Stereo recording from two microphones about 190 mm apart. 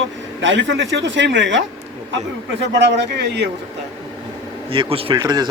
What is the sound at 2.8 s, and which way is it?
Speech, 65° right (ahead or behind).